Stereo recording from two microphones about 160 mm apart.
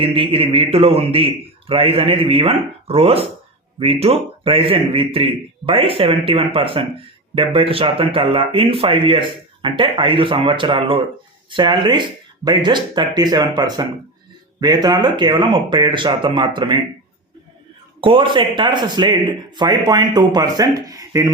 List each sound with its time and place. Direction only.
0.0 s speech: 35° right (ahead or behind)
18.0 s speech: 30° right (ahead or behind)